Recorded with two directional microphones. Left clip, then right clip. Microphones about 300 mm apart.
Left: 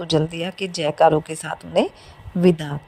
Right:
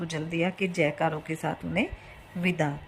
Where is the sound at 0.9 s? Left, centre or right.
Left.